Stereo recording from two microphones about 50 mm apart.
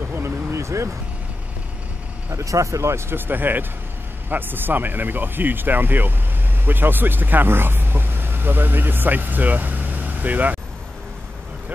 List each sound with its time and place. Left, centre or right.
0.1 s a sound: right
2.3 s speech: right
3.1 s speech: right